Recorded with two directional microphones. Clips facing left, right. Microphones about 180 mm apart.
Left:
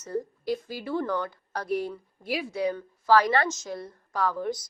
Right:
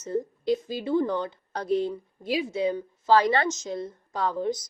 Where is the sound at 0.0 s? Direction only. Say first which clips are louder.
Right 3 dB; 20° right (ahead or behind).